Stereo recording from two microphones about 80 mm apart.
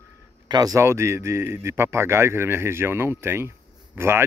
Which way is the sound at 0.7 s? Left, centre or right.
Right.